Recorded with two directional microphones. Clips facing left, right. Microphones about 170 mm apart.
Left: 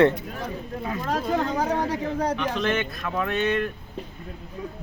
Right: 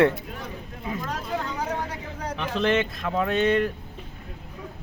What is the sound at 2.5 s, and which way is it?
Speech, 25° right (ahead or behind).